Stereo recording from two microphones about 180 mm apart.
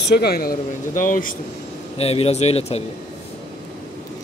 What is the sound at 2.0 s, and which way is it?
Speech, 35° left (ahead or behind).